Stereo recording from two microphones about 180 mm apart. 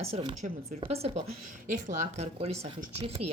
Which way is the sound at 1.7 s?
45° right (ahead or behind).